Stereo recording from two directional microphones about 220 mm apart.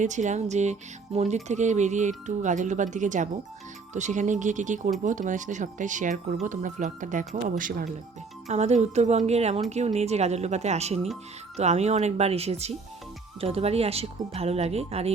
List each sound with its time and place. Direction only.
0.0 s a woman's voice: 35° right (ahead or behind)